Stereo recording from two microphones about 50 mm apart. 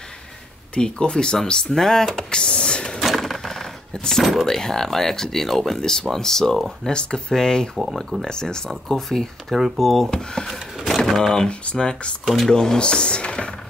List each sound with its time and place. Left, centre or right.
0.7 s speech: centre
3.0 s a sound: centre
4.5 s speech: centre
7.7 s speech: centre
8.3 s speech: centre
10.9 s a sound: centre
11.4 s speech: centre